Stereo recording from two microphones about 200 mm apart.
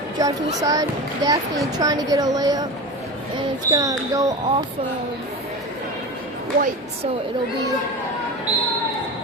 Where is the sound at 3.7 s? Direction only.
15° right (ahead or behind).